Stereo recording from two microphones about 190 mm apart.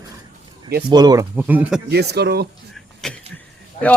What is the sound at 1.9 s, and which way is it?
Speech, 60° right (ahead or behind).